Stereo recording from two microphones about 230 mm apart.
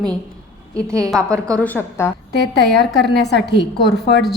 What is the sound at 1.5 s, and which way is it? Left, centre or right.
Speech, centre.